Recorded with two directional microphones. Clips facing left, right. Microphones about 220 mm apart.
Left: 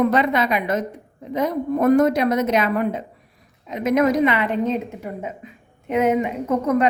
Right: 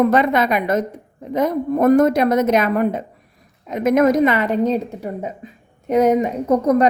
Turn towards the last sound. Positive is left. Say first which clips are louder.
# right 4 dB
turn(degrees=-40)  # may be behind; listen again after turning